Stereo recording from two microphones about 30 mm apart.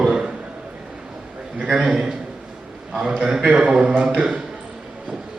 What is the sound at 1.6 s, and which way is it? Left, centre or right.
Speech, right.